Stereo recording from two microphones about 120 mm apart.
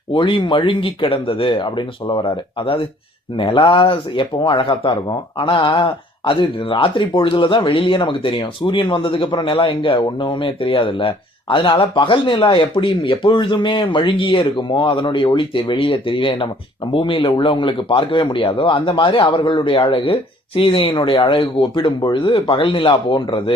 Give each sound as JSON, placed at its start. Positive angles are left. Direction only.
{"t": 0.1, "sound": "speech", "side_deg": 45}